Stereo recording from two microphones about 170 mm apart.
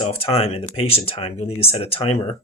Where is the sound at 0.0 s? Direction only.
35° left (ahead or behind).